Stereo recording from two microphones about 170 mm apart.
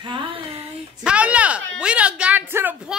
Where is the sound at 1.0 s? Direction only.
5° right (ahead or behind).